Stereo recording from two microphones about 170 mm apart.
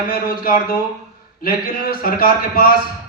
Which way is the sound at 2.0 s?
60° left (ahead or behind).